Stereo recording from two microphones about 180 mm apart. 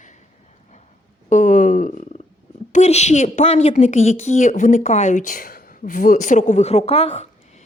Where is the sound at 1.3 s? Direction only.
45° left (ahead or behind).